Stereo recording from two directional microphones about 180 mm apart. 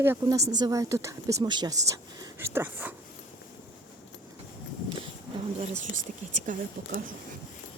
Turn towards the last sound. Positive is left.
turn(degrees=-50)  # may be behind; listen again after turning